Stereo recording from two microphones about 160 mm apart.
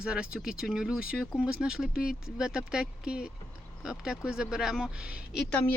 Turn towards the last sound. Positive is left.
turn(degrees=5)  # may be behind; listen again after turning